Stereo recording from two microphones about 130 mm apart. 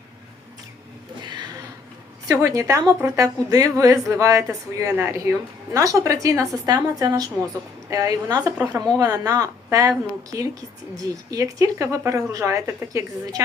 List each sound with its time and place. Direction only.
2.2 s speech: 25° right (ahead or behind)